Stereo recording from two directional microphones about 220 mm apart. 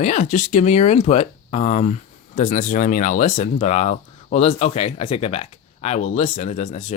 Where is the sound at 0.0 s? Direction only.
35° left (ahead or behind).